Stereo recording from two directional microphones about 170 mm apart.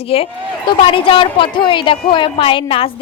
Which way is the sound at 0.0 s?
35° left (ahead or behind).